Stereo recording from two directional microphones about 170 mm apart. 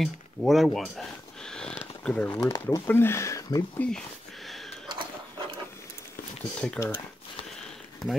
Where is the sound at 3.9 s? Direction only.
Centre (ahead or behind).